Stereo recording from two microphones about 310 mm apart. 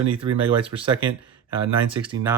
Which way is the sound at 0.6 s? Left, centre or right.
Centre.